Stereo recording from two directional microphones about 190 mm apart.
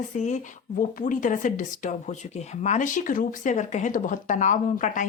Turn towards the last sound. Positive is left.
turn(degrees=40)  # may be behind; listen again after turning